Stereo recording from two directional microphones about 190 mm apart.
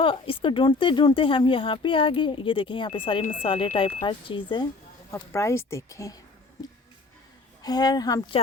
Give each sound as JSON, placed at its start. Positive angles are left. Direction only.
{"t": 0.0, "sound": "speech", "side_deg": 25}
{"t": 7.6, "sound": "speech", "side_deg": 20}